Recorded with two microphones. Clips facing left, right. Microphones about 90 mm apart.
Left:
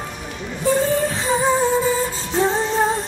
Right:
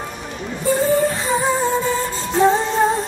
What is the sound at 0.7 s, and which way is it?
Music, centre (ahead or behind).